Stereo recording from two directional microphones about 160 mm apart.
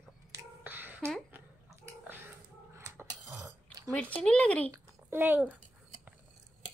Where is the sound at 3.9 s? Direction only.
5° left (ahead or behind).